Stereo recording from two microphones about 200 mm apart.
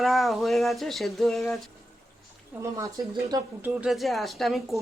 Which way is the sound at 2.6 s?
20° right (ahead or behind).